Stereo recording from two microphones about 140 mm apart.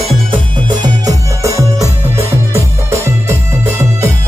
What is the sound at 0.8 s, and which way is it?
Music, 25° right (ahead or behind).